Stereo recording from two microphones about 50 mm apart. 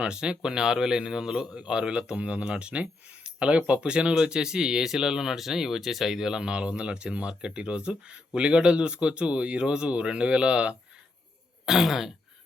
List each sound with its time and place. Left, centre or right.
0.0 s speech: centre
3.2 s a sound: right
3.7 s speech: right
11.6 s throat clearing: centre